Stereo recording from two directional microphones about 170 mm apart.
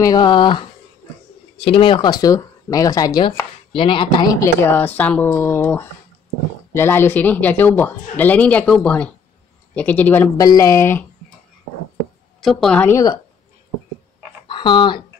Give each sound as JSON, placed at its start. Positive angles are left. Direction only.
{"t": 0.0, "sound": "speech", "side_deg": 25}
{"t": 12.4, "sound": "a woman's voice", "side_deg": 0}
{"t": 14.5, "sound": "speech", "side_deg": 30}